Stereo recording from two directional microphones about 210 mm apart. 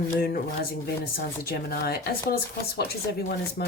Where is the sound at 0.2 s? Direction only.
45° left (ahead or behind).